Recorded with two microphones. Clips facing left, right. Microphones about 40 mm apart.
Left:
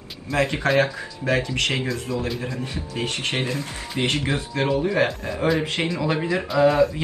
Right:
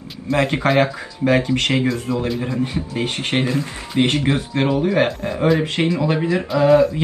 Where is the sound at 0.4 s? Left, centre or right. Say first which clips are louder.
Right 3 dB; right.